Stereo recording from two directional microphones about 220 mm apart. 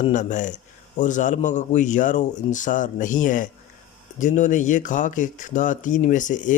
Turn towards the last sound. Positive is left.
turn(degrees=35)  # may be behind; listen again after turning